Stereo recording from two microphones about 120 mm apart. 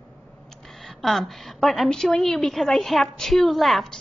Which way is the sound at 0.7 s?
Centre (ahead or behind).